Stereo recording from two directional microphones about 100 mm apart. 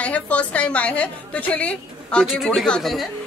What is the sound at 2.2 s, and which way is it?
Speech, centre (ahead or behind).